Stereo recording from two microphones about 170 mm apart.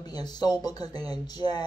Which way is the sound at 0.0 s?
25° left (ahead or behind).